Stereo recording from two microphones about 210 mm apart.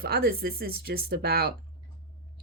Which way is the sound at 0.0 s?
45° right (ahead or behind).